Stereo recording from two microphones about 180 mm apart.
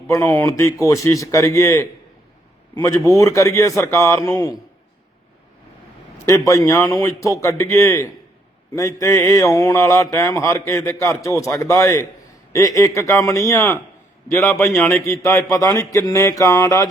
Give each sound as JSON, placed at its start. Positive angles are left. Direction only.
{"t": 0.1, "sound": "a man's voice", "side_deg": 15}
{"t": 6.3, "sound": "speech", "side_deg": 20}